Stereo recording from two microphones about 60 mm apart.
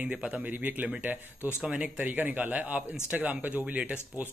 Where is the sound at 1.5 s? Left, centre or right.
Centre.